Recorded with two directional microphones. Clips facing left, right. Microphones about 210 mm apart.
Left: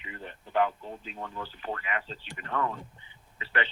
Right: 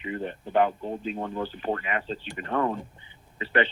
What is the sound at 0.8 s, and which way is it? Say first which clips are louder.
Speech: right 10 dB; 50° right (ahead or behind).